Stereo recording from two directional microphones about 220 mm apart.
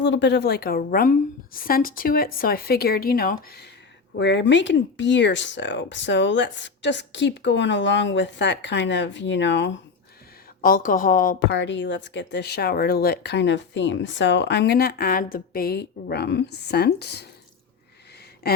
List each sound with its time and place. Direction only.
0.0 s speech: 55° left (ahead or behind)
10.6 s speech: 40° left (ahead or behind)
18.4 s speech: 45° left (ahead or behind)